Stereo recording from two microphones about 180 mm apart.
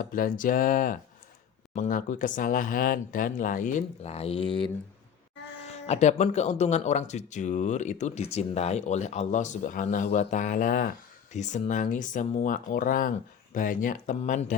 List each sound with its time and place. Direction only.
0.0 s speech: 50° left (ahead or behind)